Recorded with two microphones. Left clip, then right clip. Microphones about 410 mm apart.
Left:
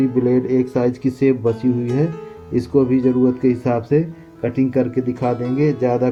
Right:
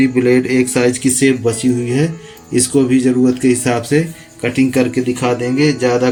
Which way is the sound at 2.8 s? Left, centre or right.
Left.